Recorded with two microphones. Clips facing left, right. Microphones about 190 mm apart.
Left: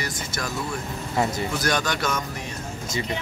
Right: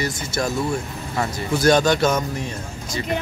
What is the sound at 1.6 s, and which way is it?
Speech, 25° right (ahead or behind).